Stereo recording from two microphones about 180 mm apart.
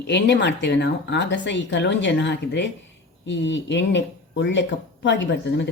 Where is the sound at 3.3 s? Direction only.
90° left.